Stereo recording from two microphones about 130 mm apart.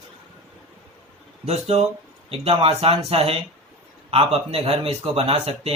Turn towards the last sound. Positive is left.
turn(degrees=-50)  # may be behind; listen again after turning